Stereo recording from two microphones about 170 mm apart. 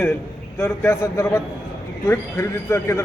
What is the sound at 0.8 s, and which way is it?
A man's voice, 15° left (ahead or behind).